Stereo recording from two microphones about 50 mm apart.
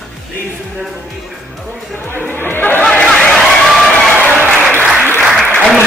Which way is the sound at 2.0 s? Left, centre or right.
Left.